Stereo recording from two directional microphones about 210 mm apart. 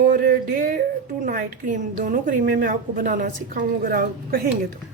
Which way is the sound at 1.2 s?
40° right (ahead or behind).